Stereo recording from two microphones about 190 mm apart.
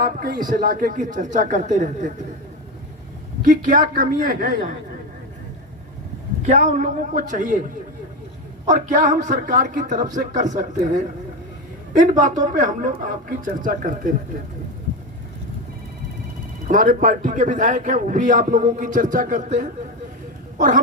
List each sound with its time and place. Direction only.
0.0 s a man's voice: 45° right (ahead or behind)
3.4 s a man's voice: 45° right (ahead or behind)
6.4 s a man's voice: 40° right (ahead or behind)
16.6 s a man's voice: 45° right (ahead or behind)